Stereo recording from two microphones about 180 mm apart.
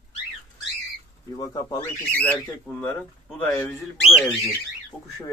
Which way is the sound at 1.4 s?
20° left (ahead or behind).